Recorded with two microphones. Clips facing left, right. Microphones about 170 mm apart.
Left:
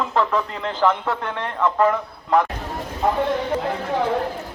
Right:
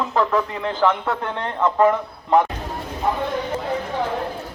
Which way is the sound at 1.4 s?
20° right (ahead or behind).